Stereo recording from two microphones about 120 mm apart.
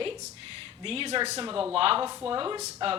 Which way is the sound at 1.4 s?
45° right (ahead or behind).